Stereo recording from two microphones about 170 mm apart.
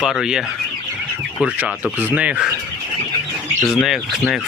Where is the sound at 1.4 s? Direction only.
10° right (ahead or behind).